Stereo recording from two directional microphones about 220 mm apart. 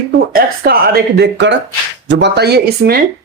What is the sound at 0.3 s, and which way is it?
Speech, 45° right (ahead or behind).